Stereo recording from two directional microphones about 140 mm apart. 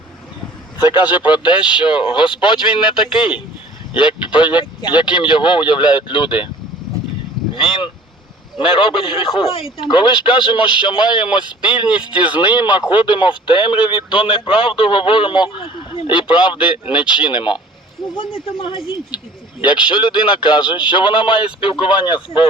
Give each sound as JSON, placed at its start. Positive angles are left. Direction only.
{"t": 0.8, "sound": "speech", "side_deg": 30}
{"t": 7.5, "sound": "speech", "side_deg": 35}
{"t": 12.2, "sound": "speech", "side_deg": -10}
{"t": 12.9, "sound": "speech", "side_deg": 35}